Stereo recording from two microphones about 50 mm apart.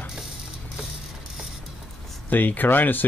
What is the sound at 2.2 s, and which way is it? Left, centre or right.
Speech, left.